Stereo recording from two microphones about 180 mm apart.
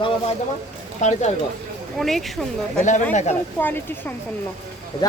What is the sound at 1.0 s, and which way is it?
Speech, 40° left (ahead or behind).